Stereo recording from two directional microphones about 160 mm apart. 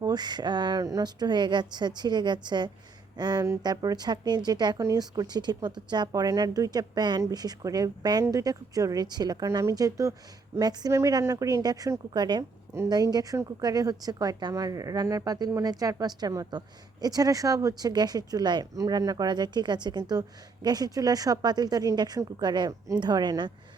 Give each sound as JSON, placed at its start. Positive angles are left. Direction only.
{"t": 0.0, "sound": "speech", "side_deg": -25}